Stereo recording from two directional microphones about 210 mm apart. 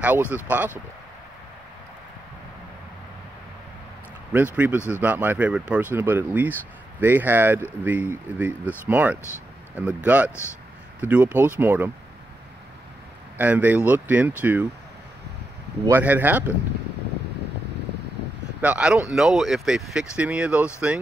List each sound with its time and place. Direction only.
0.0 s speech: 10° right (ahead or behind)
4.6 s speech: 5° right (ahead or behind)
13.4 s speech: 10° right (ahead or behind)
15.9 s speech: 10° right (ahead or behind)
18.6 s speech: 5° right (ahead or behind)